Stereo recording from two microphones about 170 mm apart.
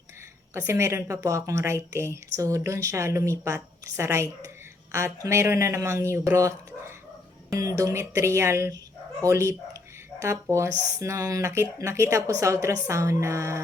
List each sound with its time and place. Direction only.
0.5 s a woman's voice: 15° right (ahead or behind)